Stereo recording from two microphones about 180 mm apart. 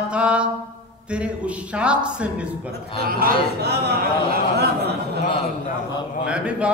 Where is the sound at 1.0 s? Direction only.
5° right (ahead or behind).